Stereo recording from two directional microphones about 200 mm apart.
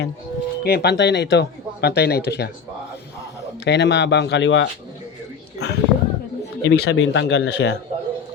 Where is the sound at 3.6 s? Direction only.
60° left (ahead or behind).